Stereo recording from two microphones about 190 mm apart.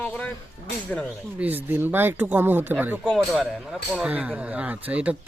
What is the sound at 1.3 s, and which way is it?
Speech, 10° right (ahead or behind).